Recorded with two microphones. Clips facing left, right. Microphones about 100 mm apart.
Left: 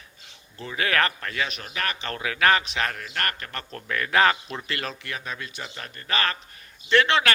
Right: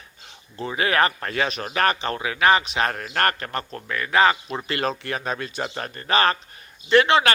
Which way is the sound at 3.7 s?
5° right (ahead or behind).